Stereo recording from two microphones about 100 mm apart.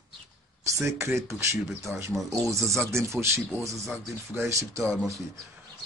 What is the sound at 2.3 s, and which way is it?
Speech, 30° right (ahead or behind).